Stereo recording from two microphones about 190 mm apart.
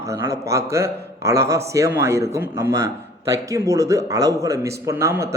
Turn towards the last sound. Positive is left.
turn(degrees=-15)  # may be behind; listen again after turning